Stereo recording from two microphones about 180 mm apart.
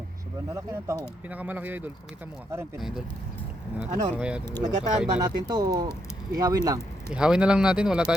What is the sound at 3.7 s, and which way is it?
Speech, 5° right (ahead or behind).